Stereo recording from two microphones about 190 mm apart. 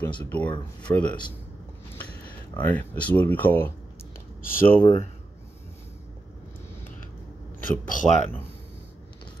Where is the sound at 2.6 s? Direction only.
10° left (ahead or behind).